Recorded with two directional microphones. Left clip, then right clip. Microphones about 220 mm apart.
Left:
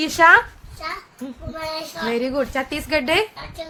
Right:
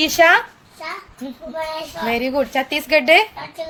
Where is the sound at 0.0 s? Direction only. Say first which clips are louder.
Even; 25° left (ahead or behind).